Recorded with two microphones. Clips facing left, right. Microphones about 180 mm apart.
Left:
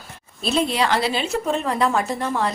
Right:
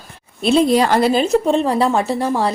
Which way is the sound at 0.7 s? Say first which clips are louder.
Right 7 dB; 45° right (ahead or behind).